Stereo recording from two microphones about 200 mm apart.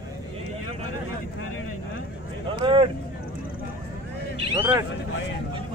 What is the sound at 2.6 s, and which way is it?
Speech, 25° right (ahead or behind).